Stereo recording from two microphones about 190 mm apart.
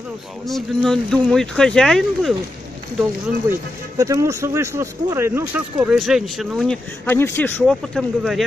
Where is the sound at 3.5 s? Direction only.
15° right (ahead or behind).